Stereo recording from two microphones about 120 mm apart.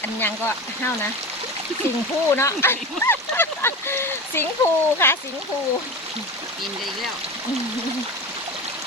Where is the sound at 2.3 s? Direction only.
20° left (ahead or behind).